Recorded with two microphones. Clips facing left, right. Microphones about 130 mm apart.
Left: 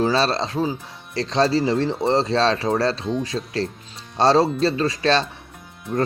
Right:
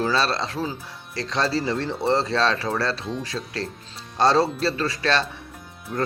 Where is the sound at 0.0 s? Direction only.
25° left (ahead or behind).